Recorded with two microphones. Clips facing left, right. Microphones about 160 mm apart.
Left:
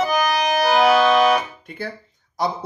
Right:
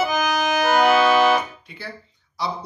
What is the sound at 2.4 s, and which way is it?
Speech, 45° left (ahead or behind).